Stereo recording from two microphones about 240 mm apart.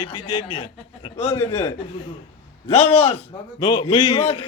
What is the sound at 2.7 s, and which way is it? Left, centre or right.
A man's voice, left.